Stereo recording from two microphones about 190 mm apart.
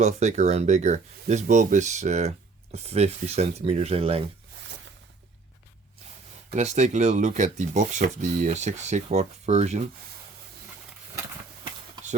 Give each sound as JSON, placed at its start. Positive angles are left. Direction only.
{"t": 0.0, "sound": "speech", "side_deg": -35}
{"t": 6.5, "sound": "speech", "side_deg": -35}